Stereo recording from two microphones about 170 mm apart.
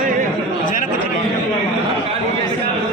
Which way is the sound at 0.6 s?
50° left (ahead or behind).